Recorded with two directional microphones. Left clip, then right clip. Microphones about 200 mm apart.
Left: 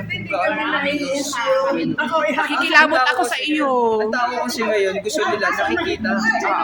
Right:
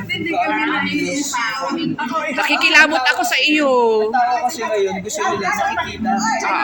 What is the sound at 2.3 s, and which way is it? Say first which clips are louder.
A woman's voice: right 4 dB; centre (ahead or behind).